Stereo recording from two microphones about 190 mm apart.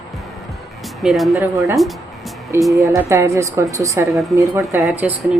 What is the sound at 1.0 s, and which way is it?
Speech, centre (ahead or behind).